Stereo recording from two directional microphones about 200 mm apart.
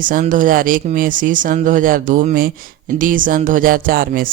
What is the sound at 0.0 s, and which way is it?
Speech, 40° right (ahead or behind).